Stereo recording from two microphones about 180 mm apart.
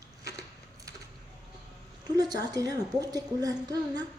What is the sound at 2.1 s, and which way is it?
Speech, 20° right (ahead or behind).